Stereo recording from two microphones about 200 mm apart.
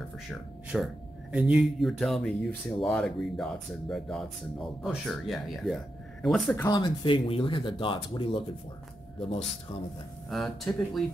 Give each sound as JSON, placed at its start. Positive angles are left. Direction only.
{"t": 0.3, "sound": "speech", "side_deg": 0}
{"t": 6.5, "sound": "speech", "side_deg": 15}
{"t": 10.3, "sound": "speech", "side_deg": 0}